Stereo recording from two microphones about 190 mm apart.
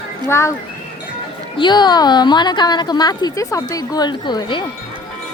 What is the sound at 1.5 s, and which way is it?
A woman's voice, 25° left (ahead or behind).